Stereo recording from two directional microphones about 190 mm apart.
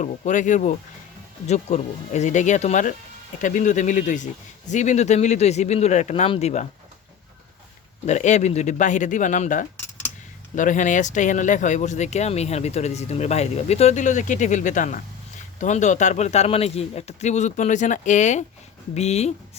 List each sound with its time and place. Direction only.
0.0 s speech: 40° left (ahead or behind)
8.0 s speech: 40° left (ahead or behind)